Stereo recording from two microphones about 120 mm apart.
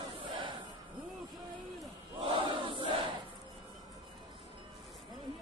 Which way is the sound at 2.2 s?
45° right (ahead or behind).